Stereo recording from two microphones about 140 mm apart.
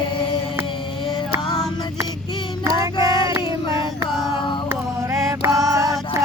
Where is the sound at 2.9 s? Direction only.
35° left (ahead or behind).